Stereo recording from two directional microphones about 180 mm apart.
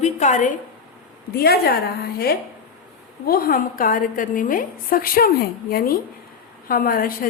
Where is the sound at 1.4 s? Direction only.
60° left (ahead or behind).